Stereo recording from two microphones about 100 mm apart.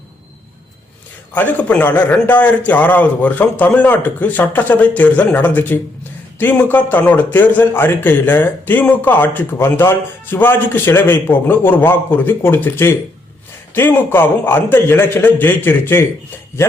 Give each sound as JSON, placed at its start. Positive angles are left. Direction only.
{"t": 1.3, "sound": "a man's voice", "side_deg": 15}